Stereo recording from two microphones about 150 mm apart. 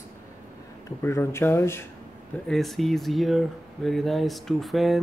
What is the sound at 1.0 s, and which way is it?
Speech, 15° left (ahead or behind).